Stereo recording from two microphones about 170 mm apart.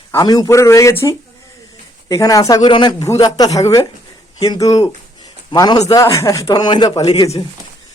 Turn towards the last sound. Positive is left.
turn(degrees=20)  # may be behind; listen again after turning